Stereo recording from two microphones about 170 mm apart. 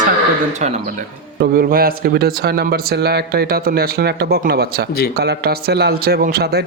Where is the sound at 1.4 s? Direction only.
65° right (ahead or behind).